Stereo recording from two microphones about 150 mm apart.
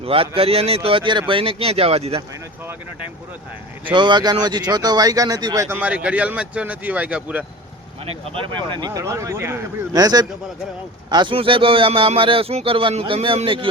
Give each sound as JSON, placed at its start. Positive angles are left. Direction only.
{"t": 0.0, "sound": "a man's voice", "side_deg": -40}
{"t": 3.8, "sound": "speech", "side_deg": -30}
{"t": 5.7, "sound": "speech", "side_deg": -10}
{"t": 8.0, "sound": "a man's voice", "side_deg": -35}